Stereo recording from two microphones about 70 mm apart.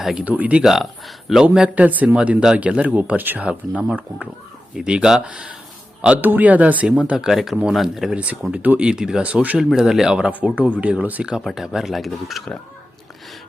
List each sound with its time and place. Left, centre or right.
0.0 s speech: centre
0.3 s speech: right
0.6 s speech: centre
1.7 s speech: right
6.2 s speech: right; by 8.1 s centre
8.1 s speech: centre
9.7 s speech: centre
11.4 s speech: centre